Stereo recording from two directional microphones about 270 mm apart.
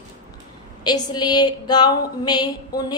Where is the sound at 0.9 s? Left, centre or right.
Centre.